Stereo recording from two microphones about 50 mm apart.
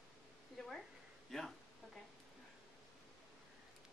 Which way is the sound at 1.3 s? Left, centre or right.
Centre.